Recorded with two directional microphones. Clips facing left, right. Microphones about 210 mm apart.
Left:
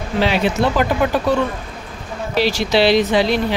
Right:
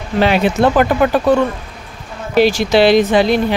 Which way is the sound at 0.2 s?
55° right (ahead or behind).